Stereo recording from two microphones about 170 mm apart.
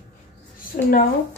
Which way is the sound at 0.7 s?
50° left (ahead or behind).